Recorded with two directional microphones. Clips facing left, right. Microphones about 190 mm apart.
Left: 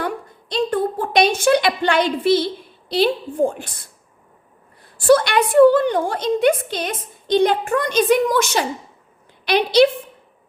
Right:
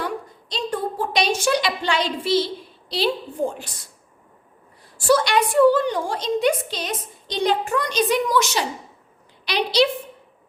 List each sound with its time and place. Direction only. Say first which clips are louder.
0.0 s a sound: left 3 dB; 55° left (ahead or behind)
2.9 s a woman's voice: left 5 dB; 55° left (ahead or behind)
4.9 s a woman's voice: left 4 dB; 55° left (ahead or behind)